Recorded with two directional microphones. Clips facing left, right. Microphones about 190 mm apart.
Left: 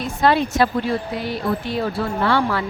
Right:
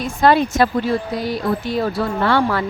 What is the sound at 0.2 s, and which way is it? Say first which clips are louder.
Speech: right 3 dB; 45° right (ahead or behind).